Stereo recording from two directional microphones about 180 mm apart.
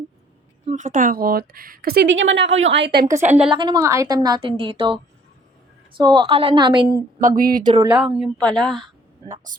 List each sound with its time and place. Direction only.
0.7 s a woman's voice: 45° right (ahead or behind); by 3.1 s 65° right (ahead or behind)
3.2 s a woman's voice: 5° right (ahead or behind)
3.5 s a woman's voice: 25° right (ahead or behind)
6.0 s a woman's voice: 25° right (ahead or behind)
7.2 s speech: 45° right (ahead or behind)
7.6 s a woman's voice: 25° right (ahead or behind)
8.4 s a woman's voice: 5° left (ahead or behind)